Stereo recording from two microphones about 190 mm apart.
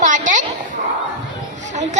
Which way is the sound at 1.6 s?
40° right (ahead or behind).